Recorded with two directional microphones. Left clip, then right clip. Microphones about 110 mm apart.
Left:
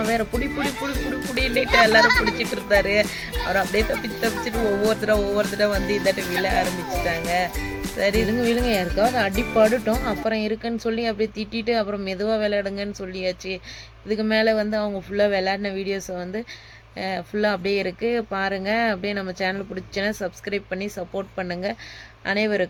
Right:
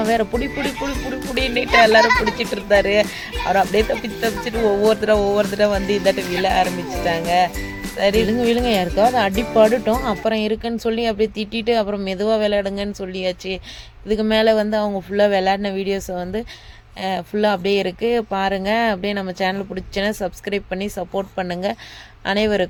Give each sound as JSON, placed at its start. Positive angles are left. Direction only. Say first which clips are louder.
{"t": 0.0, "sound": "speech", "louder": "right 4 dB", "side_deg": -40}
{"t": 9.9, "sound": "speech", "louder": "right 4 dB", "side_deg": -35}